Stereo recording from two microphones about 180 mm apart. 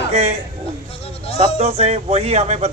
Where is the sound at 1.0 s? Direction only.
35° left (ahead or behind).